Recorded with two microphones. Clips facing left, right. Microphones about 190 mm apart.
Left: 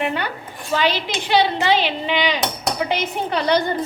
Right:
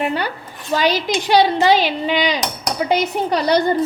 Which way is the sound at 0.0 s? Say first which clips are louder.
Right 2 dB; 40° right (ahead or behind).